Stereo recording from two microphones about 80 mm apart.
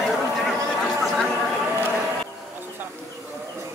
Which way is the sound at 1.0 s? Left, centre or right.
Centre.